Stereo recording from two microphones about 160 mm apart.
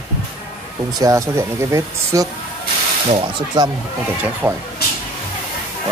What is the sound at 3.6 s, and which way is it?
Speech, 25° right (ahead or behind).